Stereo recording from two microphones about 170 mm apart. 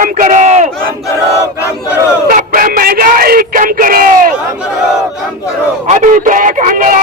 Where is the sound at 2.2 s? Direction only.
55° right (ahead or behind).